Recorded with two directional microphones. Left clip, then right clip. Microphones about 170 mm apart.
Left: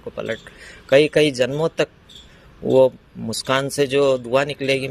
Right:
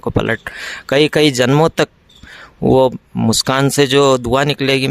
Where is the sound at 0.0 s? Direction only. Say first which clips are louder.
Right 10 dB; 45° right (ahead or behind).